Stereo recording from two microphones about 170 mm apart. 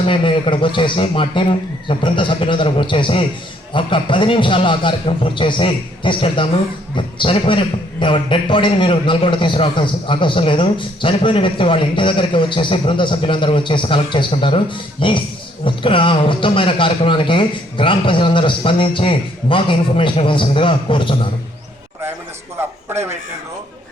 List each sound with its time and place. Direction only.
0.0 s a man's voice: 30° left (ahead or behind)